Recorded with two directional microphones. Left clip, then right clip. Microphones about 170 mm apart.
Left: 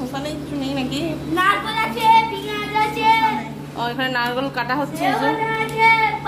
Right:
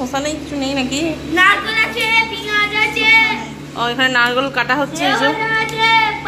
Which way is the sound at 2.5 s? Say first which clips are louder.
Right 7 dB; 30° left (ahead or behind).